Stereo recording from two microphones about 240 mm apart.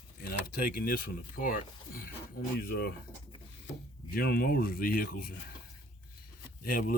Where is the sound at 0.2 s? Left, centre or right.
Left.